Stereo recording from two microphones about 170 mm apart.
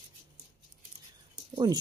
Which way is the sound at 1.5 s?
25° right (ahead or behind).